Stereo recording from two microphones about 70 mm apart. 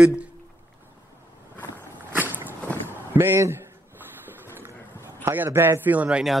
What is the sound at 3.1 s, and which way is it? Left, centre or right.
Speech, right.